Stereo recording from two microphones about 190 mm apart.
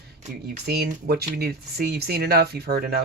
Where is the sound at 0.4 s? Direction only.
55° right (ahead or behind).